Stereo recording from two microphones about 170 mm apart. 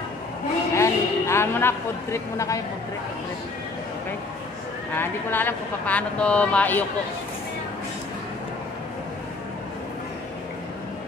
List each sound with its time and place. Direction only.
0.7 s a sound: 15° left (ahead or behind)
2.3 s speech: 20° left (ahead or behind)
4.9 s speech: 10° left (ahead or behind)